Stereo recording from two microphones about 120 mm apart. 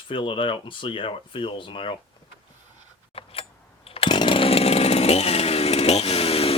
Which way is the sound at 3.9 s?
45° left (ahead or behind).